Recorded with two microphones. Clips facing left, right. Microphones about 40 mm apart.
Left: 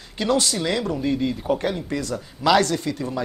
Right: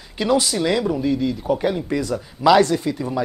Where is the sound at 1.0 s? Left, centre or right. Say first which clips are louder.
Right 2 dB; centre.